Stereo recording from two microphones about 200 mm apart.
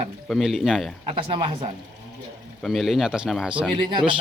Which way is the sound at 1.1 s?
25° right (ahead or behind).